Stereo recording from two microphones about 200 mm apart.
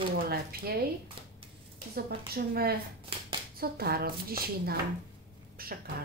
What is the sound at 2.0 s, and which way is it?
A woman's voice, 50° right (ahead or behind).